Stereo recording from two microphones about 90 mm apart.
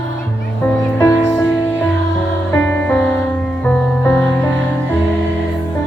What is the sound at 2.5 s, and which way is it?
Music, 20° left (ahead or behind).